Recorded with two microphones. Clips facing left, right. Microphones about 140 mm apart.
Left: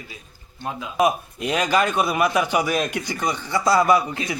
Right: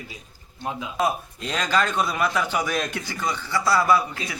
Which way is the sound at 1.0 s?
15° left (ahead or behind).